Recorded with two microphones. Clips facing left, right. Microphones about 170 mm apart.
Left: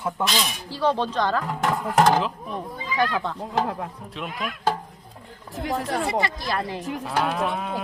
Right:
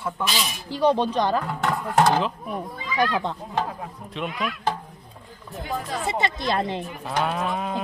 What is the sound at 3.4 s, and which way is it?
Speech, 70° left (ahead or behind).